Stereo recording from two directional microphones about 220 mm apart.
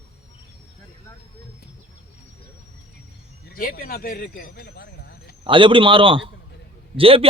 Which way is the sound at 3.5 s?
40° left (ahead or behind).